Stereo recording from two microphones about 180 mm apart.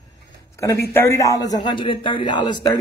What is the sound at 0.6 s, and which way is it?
A man's voice, 15° left (ahead or behind).